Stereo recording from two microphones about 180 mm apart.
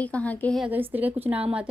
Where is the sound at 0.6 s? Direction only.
10° right (ahead or behind).